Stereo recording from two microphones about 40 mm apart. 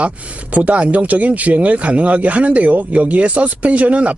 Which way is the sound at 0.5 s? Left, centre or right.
Right.